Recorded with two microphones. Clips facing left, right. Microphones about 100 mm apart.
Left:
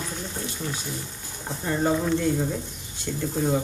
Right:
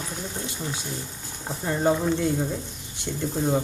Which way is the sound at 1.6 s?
15° right (ahead or behind).